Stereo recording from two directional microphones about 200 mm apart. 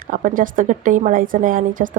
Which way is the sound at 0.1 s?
40° right (ahead or behind).